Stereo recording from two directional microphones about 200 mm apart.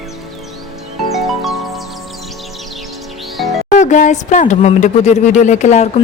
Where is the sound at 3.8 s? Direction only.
35° left (ahead or behind).